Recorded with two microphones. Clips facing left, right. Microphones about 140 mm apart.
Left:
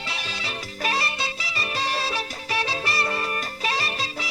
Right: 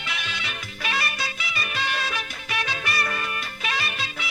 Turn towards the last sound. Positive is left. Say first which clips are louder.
# left 2 dB
turn(degrees=35)  # may be behind; listen again after turning